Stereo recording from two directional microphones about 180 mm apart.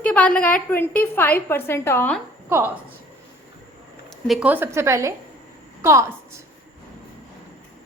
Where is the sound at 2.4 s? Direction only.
10° right (ahead or behind).